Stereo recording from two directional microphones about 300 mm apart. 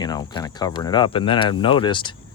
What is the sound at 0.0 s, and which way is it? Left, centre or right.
Speech, centre.